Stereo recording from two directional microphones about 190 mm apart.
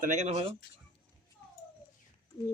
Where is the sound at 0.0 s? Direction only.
40° right (ahead or behind).